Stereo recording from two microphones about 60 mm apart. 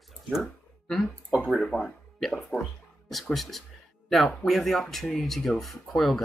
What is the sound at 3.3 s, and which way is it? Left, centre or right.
Speech, centre.